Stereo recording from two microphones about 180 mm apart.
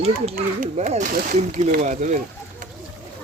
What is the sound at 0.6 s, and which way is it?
Speech, 45° right (ahead or behind).